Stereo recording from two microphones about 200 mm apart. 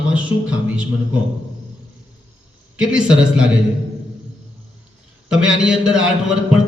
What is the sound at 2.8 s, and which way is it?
Speech, 5° right (ahead or behind).